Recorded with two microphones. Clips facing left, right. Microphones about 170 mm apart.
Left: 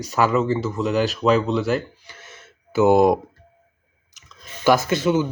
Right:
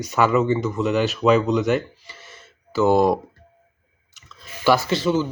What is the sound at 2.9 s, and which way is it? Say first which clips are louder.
Speech: left 2 dB; 50° left (ahead or behind).